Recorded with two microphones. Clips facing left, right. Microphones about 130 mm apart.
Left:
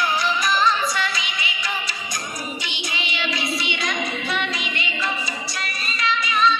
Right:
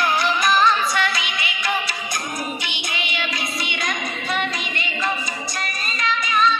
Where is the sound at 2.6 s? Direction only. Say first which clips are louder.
Right 1 dB; 55° right (ahead or behind).